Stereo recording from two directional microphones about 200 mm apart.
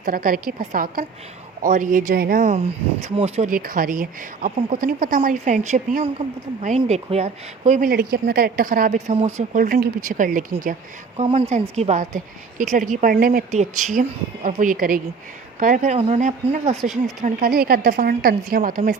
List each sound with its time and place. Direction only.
0.0 s a woman's voice: 45° right (ahead or behind)
3.5 s a woman's voice: 45° right (ahead or behind)
17.2 s a woman's voice: 50° right (ahead or behind)